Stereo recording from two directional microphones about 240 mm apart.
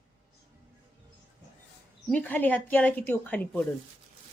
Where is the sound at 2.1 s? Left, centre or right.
Centre.